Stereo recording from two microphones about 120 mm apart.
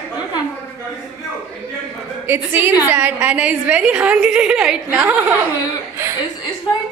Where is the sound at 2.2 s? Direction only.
15° right (ahead or behind).